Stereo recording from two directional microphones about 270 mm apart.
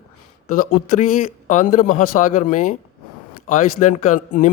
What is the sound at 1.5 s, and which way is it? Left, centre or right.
Speech, left.